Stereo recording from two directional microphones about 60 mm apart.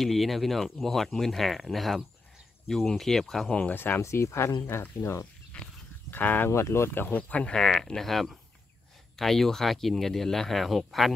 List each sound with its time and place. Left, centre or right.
0.0 s speech: centre
3.4 s speech: left
3.7 s speech: left
4.0 s speech: left
5.5 s a sound: centre
6.0 s speech: left
6.5 s speech: left
7.1 s speech: left; by 11.1 s centre